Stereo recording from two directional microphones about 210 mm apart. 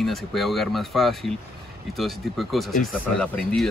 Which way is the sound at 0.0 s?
Centre (ahead or behind).